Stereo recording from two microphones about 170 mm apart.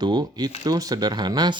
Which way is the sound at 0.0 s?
25° right (ahead or behind).